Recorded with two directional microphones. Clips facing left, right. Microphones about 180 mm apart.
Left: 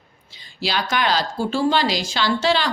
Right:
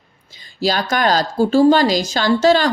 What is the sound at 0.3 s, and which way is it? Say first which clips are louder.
A woman's voice: right 7 dB; 45° right (ahead or behind).